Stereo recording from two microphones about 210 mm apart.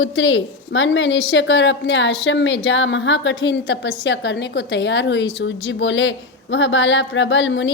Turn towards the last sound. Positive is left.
turn(degrees=60)  # may be behind; listen again after turning